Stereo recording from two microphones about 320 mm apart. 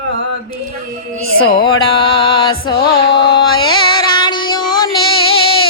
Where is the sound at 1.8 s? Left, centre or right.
Centre.